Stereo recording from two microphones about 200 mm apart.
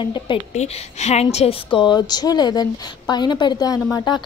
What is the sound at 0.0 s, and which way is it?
A woman's voice, 25° left (ahead or behind).